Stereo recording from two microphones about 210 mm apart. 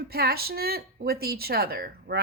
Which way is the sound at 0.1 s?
45° right (ahead or behind).